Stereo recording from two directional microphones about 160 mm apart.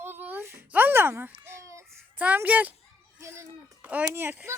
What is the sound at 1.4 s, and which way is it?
Child singing, 15° right (ahead or behind).